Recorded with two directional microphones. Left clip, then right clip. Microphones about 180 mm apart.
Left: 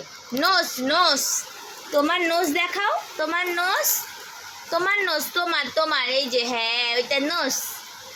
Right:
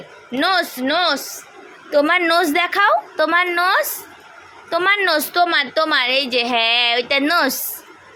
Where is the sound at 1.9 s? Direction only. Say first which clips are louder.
Right 6 dB; 35° right (ahead or behind).